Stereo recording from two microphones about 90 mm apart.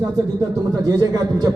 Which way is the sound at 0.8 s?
45° right (ahead or behind).